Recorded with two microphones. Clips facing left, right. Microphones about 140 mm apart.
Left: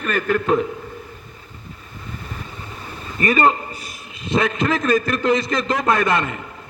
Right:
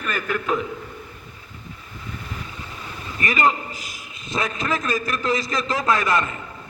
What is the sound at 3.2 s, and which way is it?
Speech, 35° left (ahead or behind).